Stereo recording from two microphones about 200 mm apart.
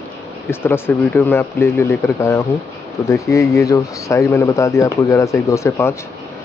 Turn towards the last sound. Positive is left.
turn(degrees=15)  # may be behind; listen again after turning